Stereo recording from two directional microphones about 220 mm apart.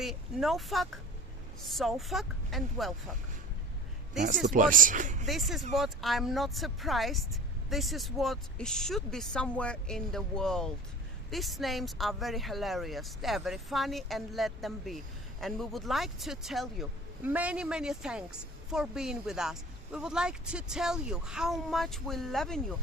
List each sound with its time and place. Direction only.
0.0 s speech: centre (ahead or behind)
4.4 s speech: 35° right (ahead or behind)
5.7 s speech: centre (ahead or behind)